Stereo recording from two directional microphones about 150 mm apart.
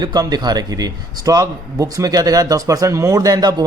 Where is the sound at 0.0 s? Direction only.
25° right (ahead or behind).